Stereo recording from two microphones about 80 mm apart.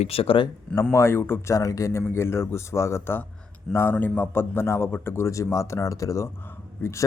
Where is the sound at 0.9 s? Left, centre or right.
Left.